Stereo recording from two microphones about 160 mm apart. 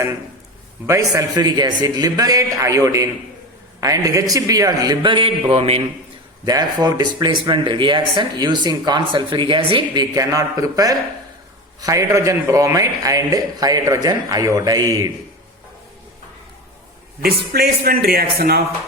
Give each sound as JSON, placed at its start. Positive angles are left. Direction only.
{"t": 0.9, "sound": "speech", "side_deg": -25}
{"t": 6.4, "sound": "speech", "side_deg": -25}
{"t": 17.2, "sound": "a man's voice", "side_deg": -75}